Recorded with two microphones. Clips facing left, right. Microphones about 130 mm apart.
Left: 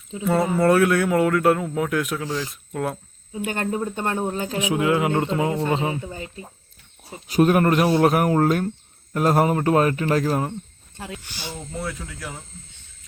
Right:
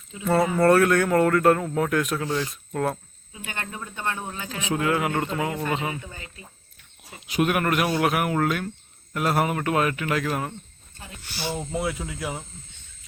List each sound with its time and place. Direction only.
0.5 s speech: 5° left (ahead or behind)
3.3 s speech: 45° left (ahead or behind)
4.5 s speech: 15° left (ahead or behind)
10.9 s speech: 85° left
11.3 s speech: 15° right (ahead or behind)